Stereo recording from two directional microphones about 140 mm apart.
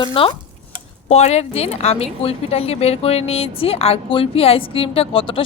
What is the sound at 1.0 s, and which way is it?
Speech, 50° left (ahead or behind).